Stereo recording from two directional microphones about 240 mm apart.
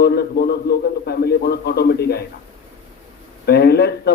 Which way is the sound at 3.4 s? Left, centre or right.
Left.